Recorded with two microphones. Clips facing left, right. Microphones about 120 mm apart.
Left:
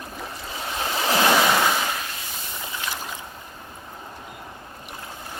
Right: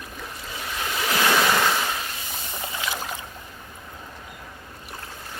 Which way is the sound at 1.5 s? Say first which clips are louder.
Left 1 dB; 10° left (ahead or behind).